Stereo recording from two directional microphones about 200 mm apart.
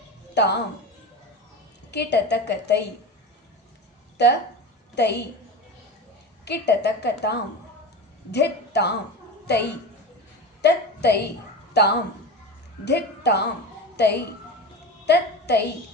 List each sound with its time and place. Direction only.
0.4 s a woman's voice: 60° left (ahead or behind)
1.9 s a woman's voice: 55° left (ahead or behind)
4.2 s a woman's voice: 60° left (ahead or behind)
6.4 s a woman's voice: 55° left (ahead or behind)